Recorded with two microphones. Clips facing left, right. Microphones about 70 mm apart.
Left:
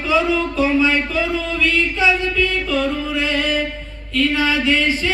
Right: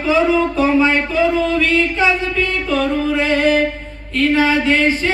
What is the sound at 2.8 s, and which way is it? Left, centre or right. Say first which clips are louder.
Speech: right 6 dB; right.